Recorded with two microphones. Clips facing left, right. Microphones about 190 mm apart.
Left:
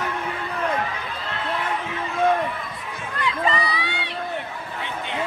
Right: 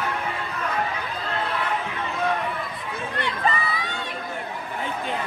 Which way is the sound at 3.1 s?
35° right (ahead or behind).